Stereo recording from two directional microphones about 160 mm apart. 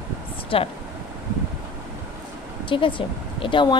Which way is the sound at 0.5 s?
35° left (ahead or behind).